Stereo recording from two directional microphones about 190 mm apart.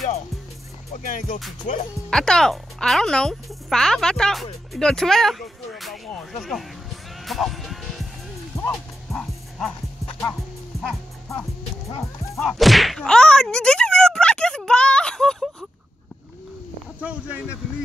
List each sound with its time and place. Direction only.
0.9 s music: 45° left (ahead or behind)
2.0 s speech: 5° left (ahead or behind)
7.2 s music: centre (ahead or behind)
8.5 s music: 15° left (ahead or behind)
9.1 s music: 5° left (ahead or behind)
12.4 s a sound: centre (ahead or behind)
17.0 s speech: 5° right (ahead or behind)